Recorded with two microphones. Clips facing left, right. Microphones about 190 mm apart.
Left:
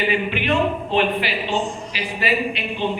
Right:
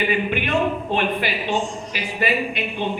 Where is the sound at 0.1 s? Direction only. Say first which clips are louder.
Even; 50° right (ahead or behind).